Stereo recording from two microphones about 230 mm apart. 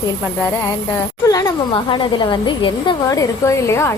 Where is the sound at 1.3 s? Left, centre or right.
Centre.